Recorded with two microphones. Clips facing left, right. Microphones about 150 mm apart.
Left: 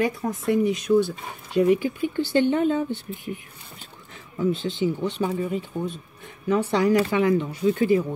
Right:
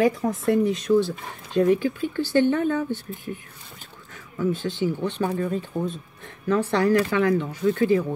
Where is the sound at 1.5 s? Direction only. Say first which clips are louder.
Even; 15° left (ahead or behind).